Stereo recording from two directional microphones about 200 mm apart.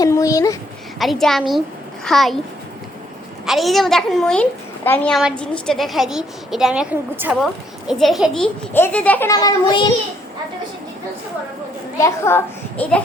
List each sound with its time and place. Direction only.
0.0 s a sound: 15° left (ahead or behind)
0.9 s a woman's voice: centre (ahead or behind)
3.4 s a woman's voice: centre (ahead or behind); by 9.8 s 20° left (ahead or behind)
12.0 s a woman's voice: 10° left (ahead or behind)